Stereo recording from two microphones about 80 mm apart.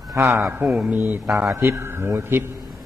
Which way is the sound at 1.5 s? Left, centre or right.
Right.